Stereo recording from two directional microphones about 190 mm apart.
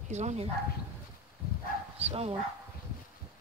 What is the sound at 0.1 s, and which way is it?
Speech, 35° right (ahead or behind).